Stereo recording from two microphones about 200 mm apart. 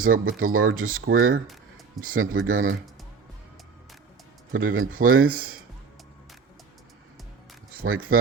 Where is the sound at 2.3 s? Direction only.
85° right.